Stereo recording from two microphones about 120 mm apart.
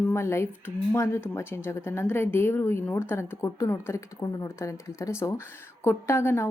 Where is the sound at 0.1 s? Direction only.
20° left (ahead or behind).